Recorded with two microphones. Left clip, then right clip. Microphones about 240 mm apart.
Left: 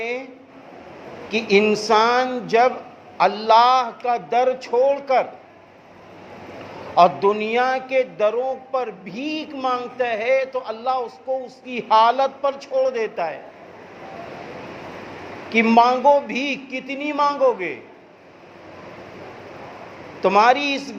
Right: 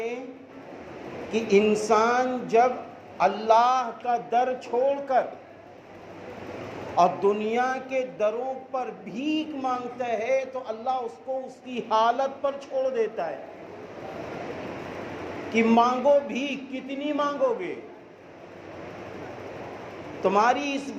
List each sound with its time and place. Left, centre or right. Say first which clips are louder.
1.3 s speech: left 4 dB; left
6.9 s speech: left 6 dB; left
15.4 s a man's voice: left 6 dB; left
20.2 s a man's voice: left 7 dB; left